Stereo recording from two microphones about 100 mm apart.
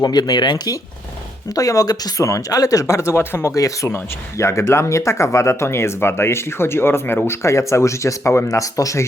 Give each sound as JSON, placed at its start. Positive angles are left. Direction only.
{"t": 0.0, "sound": "speech", "side_deg": 40}